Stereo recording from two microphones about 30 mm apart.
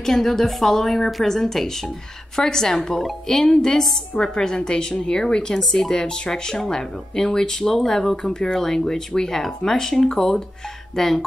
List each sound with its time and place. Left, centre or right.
0.0 s a woman's voice: centre
4.2 s a woman's voice: left
5.9 s a woman's voice: left; by 8.3 s centre
8.3 s a woman's voice: left
8.5 s a woman's voice: centre